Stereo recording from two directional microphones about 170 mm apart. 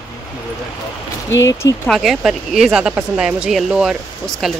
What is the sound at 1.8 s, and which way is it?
Speech, centre (ahead or behind).